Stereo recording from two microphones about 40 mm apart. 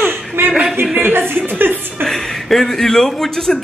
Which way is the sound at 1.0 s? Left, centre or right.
Right.